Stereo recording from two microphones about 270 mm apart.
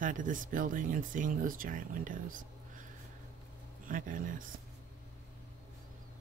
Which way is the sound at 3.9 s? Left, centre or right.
Right.